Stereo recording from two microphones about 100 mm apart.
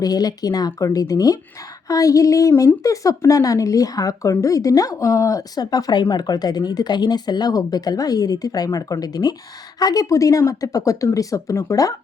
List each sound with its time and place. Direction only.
0.0 s speech: 40° left (ahead or behind)